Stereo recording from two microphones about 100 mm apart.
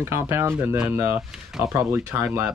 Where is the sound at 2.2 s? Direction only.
15° right (ahead or behind).